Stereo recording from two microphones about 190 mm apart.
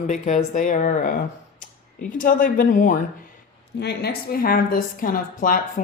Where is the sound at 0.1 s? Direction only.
40° left (ahead or behind).